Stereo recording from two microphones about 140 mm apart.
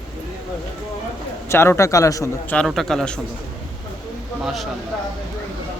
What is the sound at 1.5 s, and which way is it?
A man's voice, 20° left (ahead or behind).